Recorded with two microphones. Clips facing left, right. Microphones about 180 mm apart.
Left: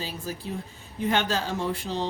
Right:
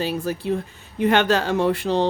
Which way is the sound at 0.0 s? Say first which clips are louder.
Right 10 dB; 65° right (ahead or behind).